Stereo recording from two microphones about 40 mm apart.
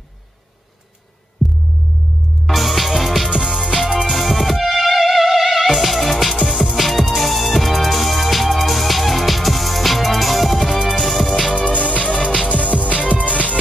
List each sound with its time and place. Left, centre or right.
2.4 s music: centre
3.3 s music: centre
3.7 s music: centre
6.5 s music: centre
6.8 s music: centre
11.7 s music: left
12.7 s music: right
13.3 s music: left